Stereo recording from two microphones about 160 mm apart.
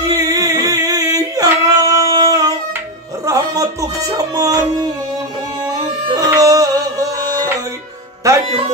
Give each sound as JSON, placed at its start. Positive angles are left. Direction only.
{"t": 0.0, "sound": "singing", "side_deg": -20}
{"t": 3.3, "sound": "music", "side_deg": -20}
{"t": 6.1, "sound": "music", "side_deg": -20}
{"t": 8.5, "sound": "music", "side_deg": -40}